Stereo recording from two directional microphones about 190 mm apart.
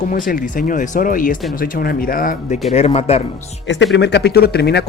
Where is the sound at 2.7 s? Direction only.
35° left (ahead or behind).